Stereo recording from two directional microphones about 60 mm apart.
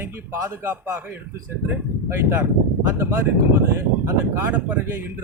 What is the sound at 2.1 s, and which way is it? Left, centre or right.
Speech, right.